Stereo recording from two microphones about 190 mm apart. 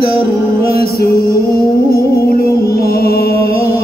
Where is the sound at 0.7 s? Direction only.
55° left (ahead or behind).